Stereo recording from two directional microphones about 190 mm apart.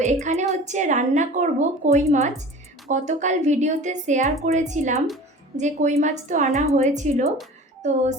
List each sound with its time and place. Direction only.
0.0 s a woman's voice: 35° right (ahead or behind)